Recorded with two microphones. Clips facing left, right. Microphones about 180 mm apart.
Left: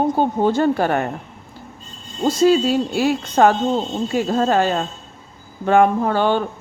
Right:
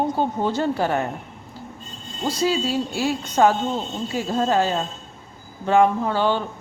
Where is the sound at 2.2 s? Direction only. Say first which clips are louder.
Left 7 dB; 50° left (ahead or behind).